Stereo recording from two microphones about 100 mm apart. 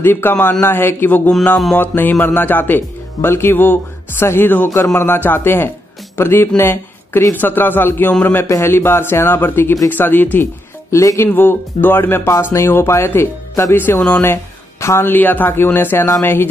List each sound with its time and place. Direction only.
0.0 s speech: 20° left (ahead or behind)